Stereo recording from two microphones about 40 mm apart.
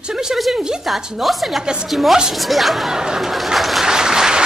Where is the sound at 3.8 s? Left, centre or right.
Centre.